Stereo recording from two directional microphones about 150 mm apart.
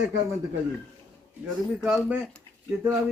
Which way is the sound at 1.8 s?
10° right (ahead or behind).